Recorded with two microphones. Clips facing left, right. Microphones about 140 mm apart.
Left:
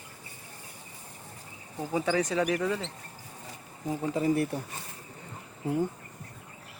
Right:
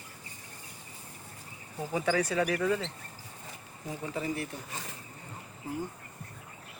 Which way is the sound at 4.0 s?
40° left (ahead or behind).